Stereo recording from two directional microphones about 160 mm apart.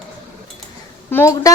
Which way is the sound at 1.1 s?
15° left (ahead or behind).